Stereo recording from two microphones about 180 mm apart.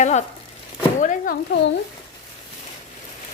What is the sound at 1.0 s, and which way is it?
Speech, 45° left (ahead or behind).